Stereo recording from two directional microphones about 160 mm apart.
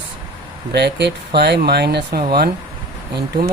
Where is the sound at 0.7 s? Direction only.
90° right.